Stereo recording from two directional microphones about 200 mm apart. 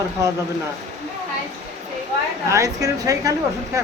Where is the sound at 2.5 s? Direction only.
15° right (ahead or behind).